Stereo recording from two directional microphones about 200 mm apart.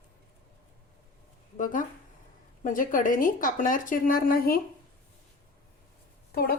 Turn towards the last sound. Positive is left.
turn(degrees=50)  # may be behind; listen again after turning